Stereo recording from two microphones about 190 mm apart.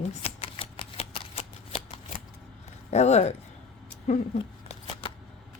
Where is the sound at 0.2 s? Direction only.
30° left (ahead or behind).